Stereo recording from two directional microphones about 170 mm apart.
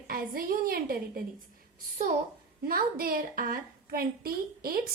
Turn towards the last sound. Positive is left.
turn(degrees=-60)  # may be behind; listen again after turning